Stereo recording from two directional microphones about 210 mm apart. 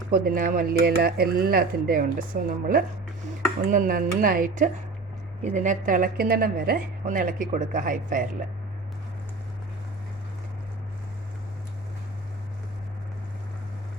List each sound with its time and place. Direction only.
0.1 s a woman's voice: 40° right (ahead or behind)